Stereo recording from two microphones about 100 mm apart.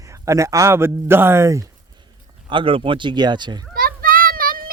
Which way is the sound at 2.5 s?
60° right (ahead or behind).